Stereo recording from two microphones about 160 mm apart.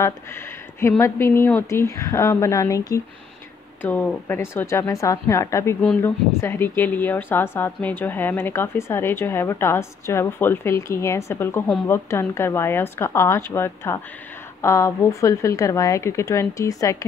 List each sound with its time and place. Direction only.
0.0 s a woman's voice: 15° left (ahead or behind)